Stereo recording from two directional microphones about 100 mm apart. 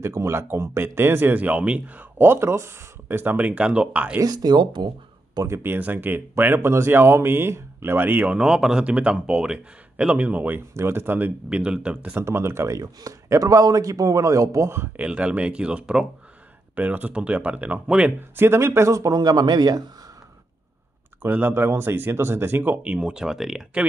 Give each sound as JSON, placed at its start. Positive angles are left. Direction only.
{"t": 0.0, "sound": "speech", "side_deg": -25}
{"t": 4.2, "sound": "speech", "side_deg": -40}
{"t": 5.3, "sound": "speech", "side_deg": -35}
{"t": 5.6, "sound": "speech", "side_deg": -20}
{"t": 8.4, "sound": "speech", "side_deg": -5}
{"t": 11.4, "sound": "speech", "side_deg": -10}
{"t": 15.0, "sound": "speech", "side_deg": -10}
{"t": 18.3, "sound": "speech", "side_deg": -25}
{"t": 21.2, "sound": "speech", "side_deg": -20}